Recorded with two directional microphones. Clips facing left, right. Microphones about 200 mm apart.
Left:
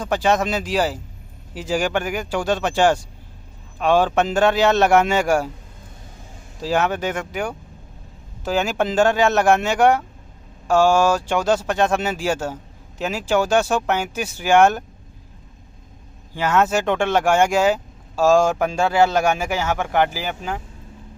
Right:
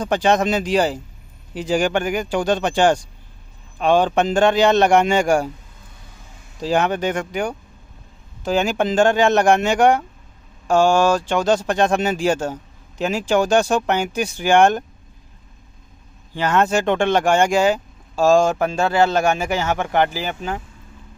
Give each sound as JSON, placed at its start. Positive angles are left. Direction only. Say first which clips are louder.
{"t": 0.0, "sound": "speech", "louder": "right 2 dB", "side_deg": 5}
{"t": 6.6, "sound": "speech", "louder": "right 2 dB", "side_deg": 5}
{"t": 16.3, "sound": "speech", "louder": "right 1 dB", "side_deg": 5}